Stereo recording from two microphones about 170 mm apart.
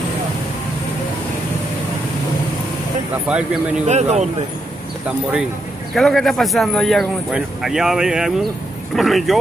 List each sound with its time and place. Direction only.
3.3 s speech: 5° right (ahead or behind)
3.8 s a man's voice: 40° right (ahead or behind)
5.0 s speech: 5° right (ahead or behind)